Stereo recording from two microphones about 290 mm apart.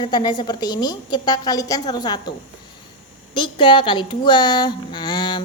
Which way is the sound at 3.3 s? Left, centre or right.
Centre.